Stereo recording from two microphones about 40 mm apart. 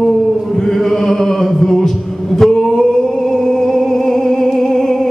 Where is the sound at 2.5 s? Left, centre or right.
Centre.